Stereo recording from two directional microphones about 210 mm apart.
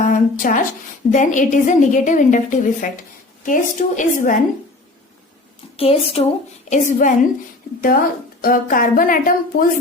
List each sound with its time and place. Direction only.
0.0 s a sound: 40° left (ahead or behind)
1.1 s a woman's voice: 35° left (ahead or behind)
5.7 s a woman's voice: 30° left (ahead or behind)
8.4 s a woman's voice: 40° left (ahead or behind)